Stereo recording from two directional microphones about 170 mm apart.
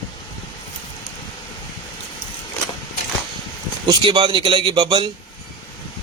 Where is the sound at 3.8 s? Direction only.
25° right (ahead or behind).